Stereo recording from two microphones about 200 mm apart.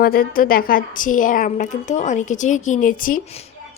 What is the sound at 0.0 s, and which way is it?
Speech, 45° left (ahead or behind).